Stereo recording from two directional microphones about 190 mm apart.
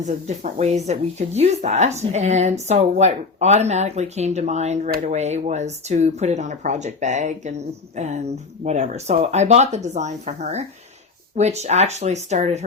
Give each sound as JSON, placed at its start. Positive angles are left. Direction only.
{"t": 0.0, "sound": "speech", "side_deg": -40}